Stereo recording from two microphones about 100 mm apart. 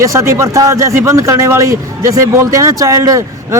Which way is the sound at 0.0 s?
30° right (ahead or behind).